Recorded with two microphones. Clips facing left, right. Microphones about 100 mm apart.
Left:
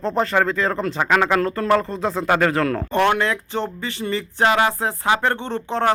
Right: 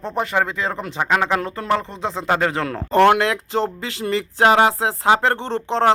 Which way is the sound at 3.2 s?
90° right.